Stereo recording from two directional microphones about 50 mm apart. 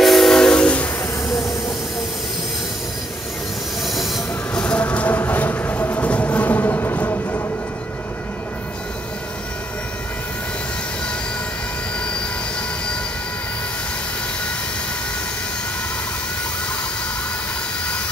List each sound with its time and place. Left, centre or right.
0.0 s train: centre
3.8 s train: centre
4.7 s train: left
5.1 s train: left
6.0 s music: left
6.6 s train: left